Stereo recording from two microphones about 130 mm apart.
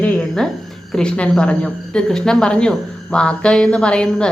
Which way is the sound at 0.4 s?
5° left (ahead or behind).